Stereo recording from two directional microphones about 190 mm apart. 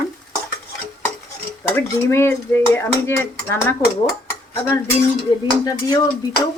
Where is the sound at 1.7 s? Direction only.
10° left (ahead or behind).